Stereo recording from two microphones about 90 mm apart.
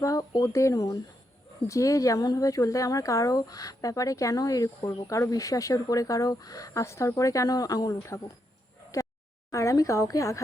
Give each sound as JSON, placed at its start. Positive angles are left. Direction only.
{"t": 0.0, "sound": "speech", "side_deg": 40}
{"t": 9.5, "sound": "speech", "side_deg": 35}